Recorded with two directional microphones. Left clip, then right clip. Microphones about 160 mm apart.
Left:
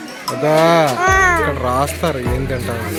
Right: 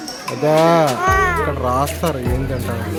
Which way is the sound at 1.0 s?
40° left (ahead or behind).